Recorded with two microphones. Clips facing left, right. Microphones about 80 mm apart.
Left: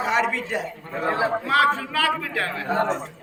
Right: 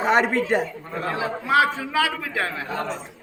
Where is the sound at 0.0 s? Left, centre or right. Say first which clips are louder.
Right 3 dB; right.